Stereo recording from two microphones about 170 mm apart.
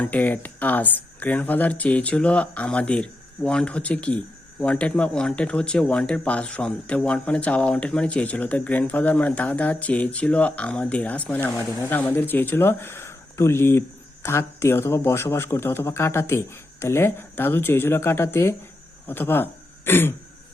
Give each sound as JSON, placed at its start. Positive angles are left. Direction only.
{"t": 0.0, "sound": "speech", "side_deg": 10}